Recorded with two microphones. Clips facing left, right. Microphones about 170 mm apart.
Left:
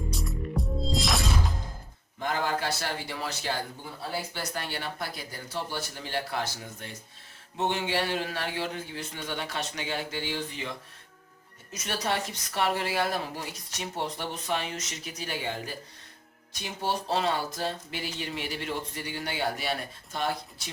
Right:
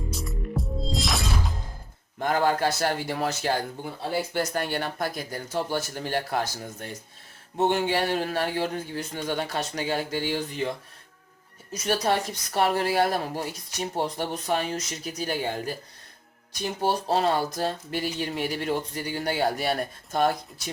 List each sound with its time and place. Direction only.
0.1 s music: centre (ahead or behind)
2.1 s speech: 50° right (ahead or behind)
11.7 s speech: 40° right (ahead or behind)
16.8 s speech: 45° right (ahead or behind)